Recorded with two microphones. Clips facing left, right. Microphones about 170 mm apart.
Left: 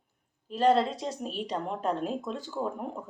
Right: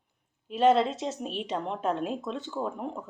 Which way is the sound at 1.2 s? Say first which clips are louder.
Right 1 dB; centre (ahead or behind).